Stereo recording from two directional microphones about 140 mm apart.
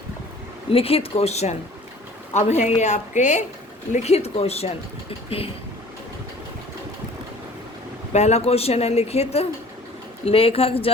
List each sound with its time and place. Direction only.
0.7 s a woman's voice: 45° left (ahead or behind)
8.1 s speech: 50° left (ahead or behind)